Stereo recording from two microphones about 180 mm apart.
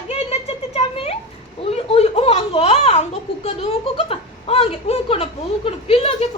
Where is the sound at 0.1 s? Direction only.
35° left (ahead or behind).